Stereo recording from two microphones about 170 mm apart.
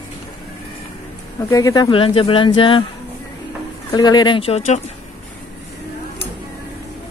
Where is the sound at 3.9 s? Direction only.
25° left (ahead or behind).